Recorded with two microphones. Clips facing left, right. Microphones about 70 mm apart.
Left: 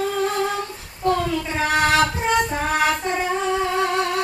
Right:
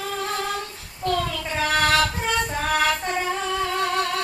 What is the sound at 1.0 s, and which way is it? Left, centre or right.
Child singing, left.